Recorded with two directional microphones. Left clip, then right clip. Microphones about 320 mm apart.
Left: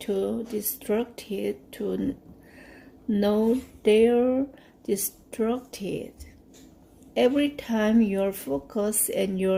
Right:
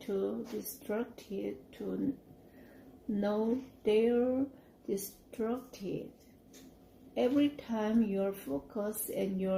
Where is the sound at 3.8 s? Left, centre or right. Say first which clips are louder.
Left 9 dB; left.